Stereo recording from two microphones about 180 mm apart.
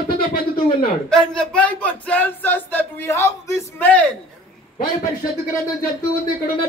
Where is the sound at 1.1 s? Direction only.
5° left (ahead or behind).